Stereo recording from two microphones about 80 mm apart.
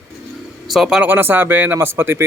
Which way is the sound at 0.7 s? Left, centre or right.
Centre.